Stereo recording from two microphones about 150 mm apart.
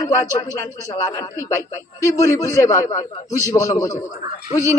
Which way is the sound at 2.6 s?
20° left (ahead or behind).